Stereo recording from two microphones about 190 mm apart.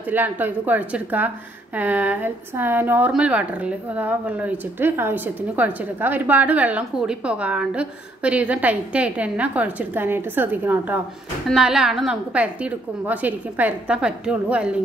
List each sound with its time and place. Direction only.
0.1 s a woman's voice: 10° right (ahead or behind)